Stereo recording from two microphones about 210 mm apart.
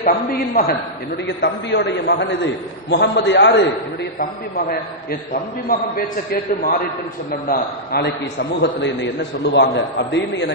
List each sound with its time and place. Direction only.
0.0 s a man's voice: 40° left (ahead or behind)
4.2 s a man's voice: 45° left (ahead or behind)
7.4 s a man's voice: 50° left (ahead or behind)